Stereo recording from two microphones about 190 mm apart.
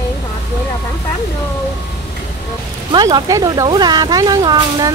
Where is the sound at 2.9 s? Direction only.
20° right (ahead or behind).